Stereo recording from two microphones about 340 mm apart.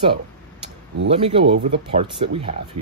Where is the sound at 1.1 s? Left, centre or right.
Centre.